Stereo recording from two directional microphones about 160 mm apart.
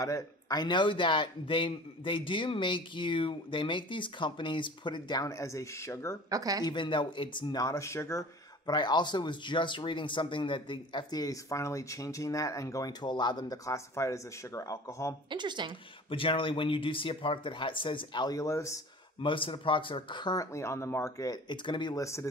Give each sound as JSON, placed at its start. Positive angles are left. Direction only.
{"t": 0.0, "sound": "speech", "side_deg": 20}
{"t": 6.3, "sound": "speech", "side_deg": -20}
{"t": 6.6, "sound": "speech", "side_deg": 30}
{"t": 15.2, "sound": "speech", "side_deg": -30}
{"t": 16.1, "sound": "speech", "side_deg": 35}
{"t": 19.2, "sound": "speech", "side_deg": 30}